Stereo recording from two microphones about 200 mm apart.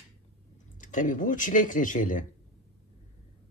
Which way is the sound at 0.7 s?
40° left (ahead or behind).